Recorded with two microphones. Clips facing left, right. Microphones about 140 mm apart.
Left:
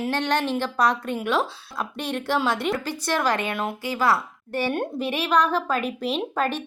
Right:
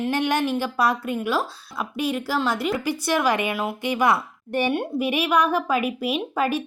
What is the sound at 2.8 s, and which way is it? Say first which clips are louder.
Speech: right 3 dB; 10° right (ahead or behind).